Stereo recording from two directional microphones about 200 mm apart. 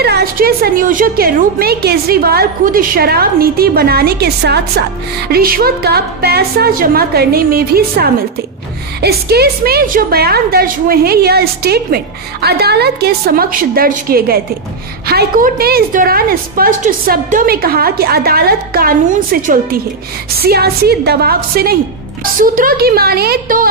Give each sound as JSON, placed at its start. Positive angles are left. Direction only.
{"t": 0.0, "sound": "a woman's voice", "side_deg": -50}